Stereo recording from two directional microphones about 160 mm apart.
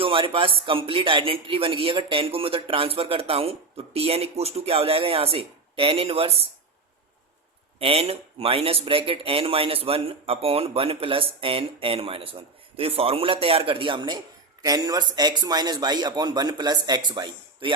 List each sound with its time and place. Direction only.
0.0 s a man's voice: 35° right (ahead or behind)
7.8 s a man's voice: 35° right (ahead or behind)